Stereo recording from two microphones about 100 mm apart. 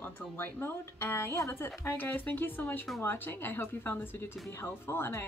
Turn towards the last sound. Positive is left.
turn(degrees=25)  # may be behind; listen again after turning